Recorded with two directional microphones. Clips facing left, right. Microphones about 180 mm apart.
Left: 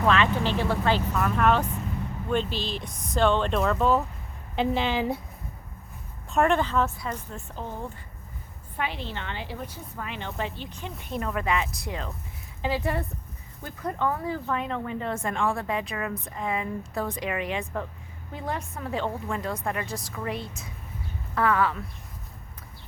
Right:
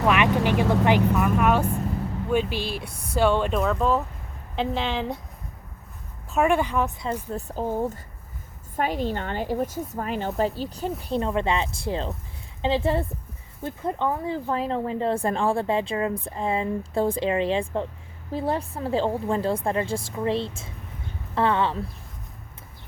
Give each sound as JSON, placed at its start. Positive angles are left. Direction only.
{"t": 0.1, "sound": "a woman's voice", "side_deg": -15}
{"t": 6.3, "sound": "speech", "side_deg": -10}
{"t": 7.3, "sound": "a woman's voice", "side_deg": -40}